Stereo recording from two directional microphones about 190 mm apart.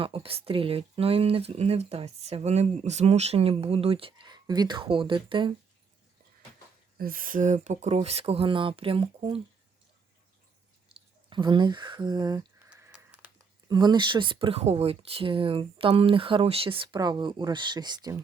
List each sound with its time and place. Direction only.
0.0 s speech: 30° right (ahead or behind)
7.0 s speech: 45° right (ahead or behind); by 9.4 s 30° right (ahead or behind)
11.3 s speech: 25° right (ahead or behind)
13.7 s speech: 20° right (ahead or behind)